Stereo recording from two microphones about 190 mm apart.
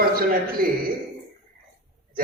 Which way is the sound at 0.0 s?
50° right (ahead or behind).